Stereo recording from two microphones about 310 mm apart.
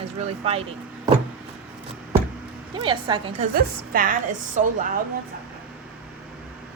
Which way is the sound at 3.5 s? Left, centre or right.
Right.